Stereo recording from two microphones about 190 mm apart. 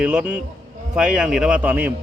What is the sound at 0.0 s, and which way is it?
A man's voice, 5° right (ahead or behind).